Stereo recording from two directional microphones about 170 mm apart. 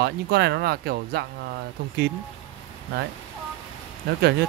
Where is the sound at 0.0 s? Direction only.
75° right (ahead or behind).